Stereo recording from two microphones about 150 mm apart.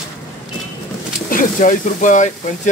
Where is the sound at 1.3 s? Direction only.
60° left (ahead or behind).